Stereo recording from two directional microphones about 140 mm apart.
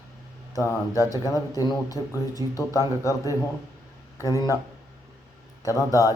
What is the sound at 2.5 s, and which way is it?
Speech, 25° left (ahead or behind).